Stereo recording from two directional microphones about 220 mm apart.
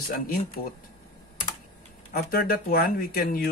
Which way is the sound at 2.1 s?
40° left (ahead or behind).